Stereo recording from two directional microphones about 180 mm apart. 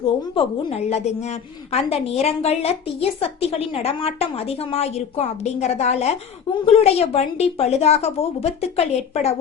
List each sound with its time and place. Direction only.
0.3 s a woman's voice: 35° left (ahead or behind)